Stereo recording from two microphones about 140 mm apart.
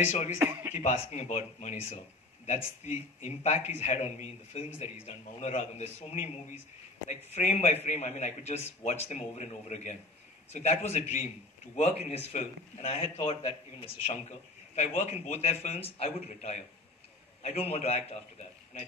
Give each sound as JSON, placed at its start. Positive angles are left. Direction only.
{"t": 0.0, "sound": "a man's voice", "side_deg": 50}
{"t": 0.4, "sound": "speech", "side_deg": -15}
{"t": 0.7, "sound": "a man's voice", "side_deg": 55}
{"t": 12.3, "sound": "a man's voice", "side_deg": 50}
{"t": 14.8, "sound": "a man's voice", "side_deg": 55}